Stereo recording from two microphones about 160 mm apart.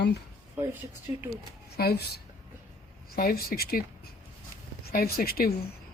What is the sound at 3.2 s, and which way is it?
Speech, 70° left (ahead or behind).